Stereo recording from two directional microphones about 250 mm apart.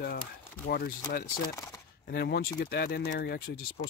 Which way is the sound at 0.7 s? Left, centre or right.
Left.